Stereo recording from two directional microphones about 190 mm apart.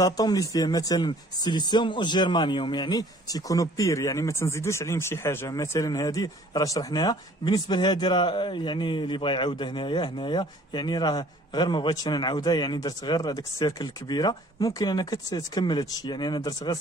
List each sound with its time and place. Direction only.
0.0 s speech: 20° left (ahead or behind)